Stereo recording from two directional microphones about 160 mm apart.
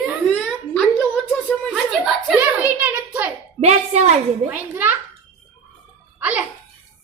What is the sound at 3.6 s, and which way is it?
Speech, 40° right (ahead or behind).